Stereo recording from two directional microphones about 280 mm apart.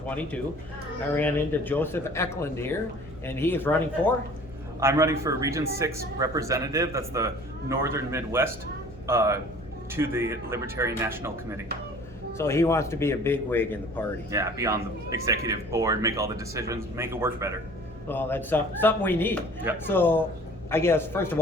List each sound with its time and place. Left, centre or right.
0.0 s a man's voice: centre
4.8 s a man's voice: centre
12.4 s a man's voice: centre
14.3 s a man's voice: centre
18.1 s a man's voice: centre